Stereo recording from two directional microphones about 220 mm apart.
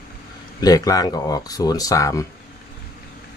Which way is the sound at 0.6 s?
15° left (ahead or behind).